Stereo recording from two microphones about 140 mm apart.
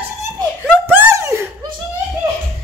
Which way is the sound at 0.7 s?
15° right (ahead or behind).